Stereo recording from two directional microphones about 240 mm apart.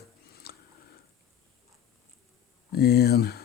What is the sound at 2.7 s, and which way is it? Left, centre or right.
Speech, left.